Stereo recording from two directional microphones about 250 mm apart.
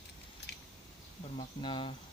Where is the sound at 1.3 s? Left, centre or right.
Centre.